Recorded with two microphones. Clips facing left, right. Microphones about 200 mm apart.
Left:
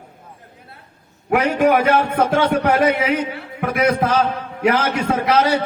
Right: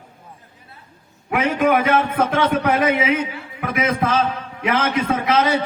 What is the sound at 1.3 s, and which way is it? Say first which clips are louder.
Speech: left 2 dB; 45° left (ahead or behind).